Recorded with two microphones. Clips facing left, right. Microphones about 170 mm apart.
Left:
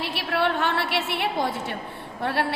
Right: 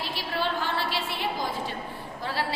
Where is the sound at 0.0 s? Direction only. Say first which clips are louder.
Left 5 dB; 65° left (ahead or behind).